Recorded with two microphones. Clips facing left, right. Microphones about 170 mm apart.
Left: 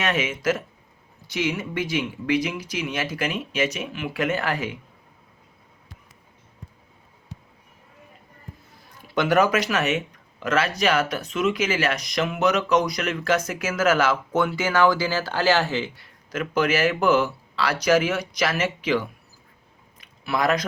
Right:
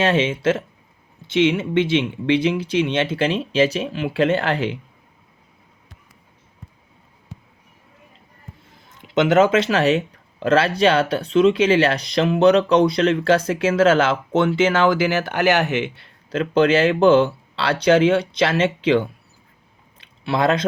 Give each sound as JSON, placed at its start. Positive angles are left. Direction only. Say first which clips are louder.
{"t": 0.0, "sound": "speech", "louder": "right 6 dB", "side_deg": -30}
{"t": 8.9, "sound": "speech", "louder": "right 5 dB", "side_deg": -20}
{"t": 20.0, "sound": "a sound", "louder": "right 4 dB", "side_deg": -30}